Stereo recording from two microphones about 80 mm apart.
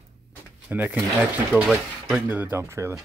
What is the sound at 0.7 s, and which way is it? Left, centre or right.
Speech, centre.